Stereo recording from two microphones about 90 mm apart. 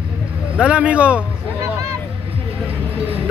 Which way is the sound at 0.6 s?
15° right (ahead or behind).